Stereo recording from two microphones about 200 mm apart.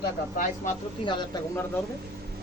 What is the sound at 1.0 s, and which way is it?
Speech, 20° left (ahead or behind).